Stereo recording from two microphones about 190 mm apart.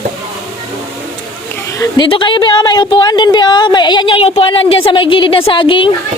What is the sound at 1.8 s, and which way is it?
A woman's voice, 25° left (ahead or behind).